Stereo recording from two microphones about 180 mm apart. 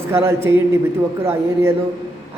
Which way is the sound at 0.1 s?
15° right (ahead or behind).